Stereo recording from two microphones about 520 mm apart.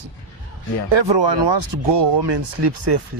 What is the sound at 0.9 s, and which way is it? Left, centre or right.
Speech, right.